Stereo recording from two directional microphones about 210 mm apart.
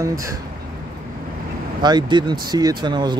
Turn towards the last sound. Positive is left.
turn(degrees=-20)  # may be behind; listen again after turning